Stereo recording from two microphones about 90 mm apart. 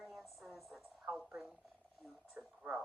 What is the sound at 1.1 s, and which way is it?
Speech, 15° right (ahead or behind).